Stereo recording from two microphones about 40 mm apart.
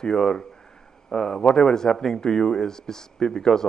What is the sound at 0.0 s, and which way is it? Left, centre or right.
Speech, centre.